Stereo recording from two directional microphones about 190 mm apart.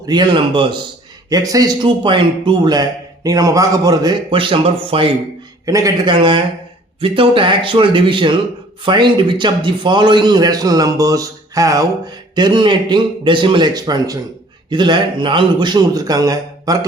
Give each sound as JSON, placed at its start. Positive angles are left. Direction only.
{"t": 0.0, "sound": "a man's voice", "side_deg": -20}
{"t": 5.6, "sound": "a man's voice", "side_deg": -15}